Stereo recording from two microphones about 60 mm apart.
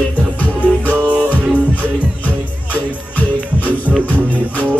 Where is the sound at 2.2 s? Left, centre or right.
Left.